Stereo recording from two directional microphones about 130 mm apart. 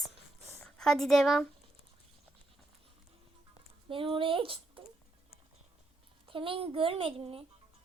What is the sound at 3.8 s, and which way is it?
Speech, 45° right (ahead or behind).